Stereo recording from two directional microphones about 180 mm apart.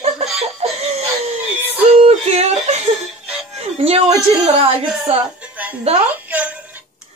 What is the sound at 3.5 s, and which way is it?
Music, 35° right (ahead or behind).